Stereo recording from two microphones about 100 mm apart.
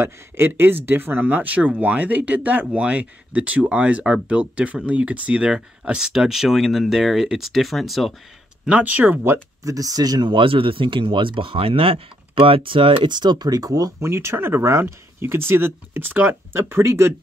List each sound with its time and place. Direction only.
0.0 s speech: 20° right (ahead or behind); by 8.1 s centre (ahead or behind)
8.6 s speech: 15° right (ahead or behind); by 10.3 s 40° right (ahead or behind)
10.3 s speech: 65° right (ahead or behind); by 17.1 s 25° right (ahead or behind)